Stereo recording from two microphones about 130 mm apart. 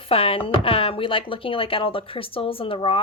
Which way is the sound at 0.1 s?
45° left (ahead or behind).